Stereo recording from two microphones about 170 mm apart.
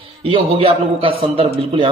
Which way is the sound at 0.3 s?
30° right (ahead or behind).